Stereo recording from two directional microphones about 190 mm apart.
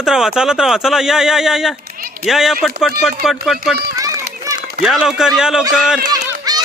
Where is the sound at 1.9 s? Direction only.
50° right (ahead or behind).